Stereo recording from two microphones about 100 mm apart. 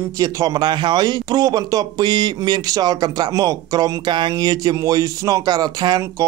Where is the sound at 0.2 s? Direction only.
40° right (ahead or behind).